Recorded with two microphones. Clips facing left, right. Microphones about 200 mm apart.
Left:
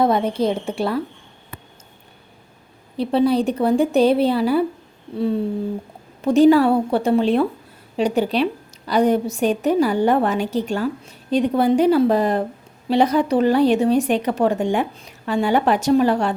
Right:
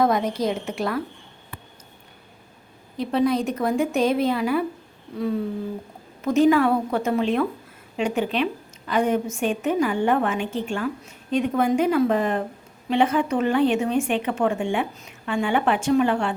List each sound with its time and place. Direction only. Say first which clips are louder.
0.0 s a woman's voice: left 3 dB; 30° left (ahead or behind)
3.0 s a woman's voice: left 4 dB; 30° left (ahead or behind)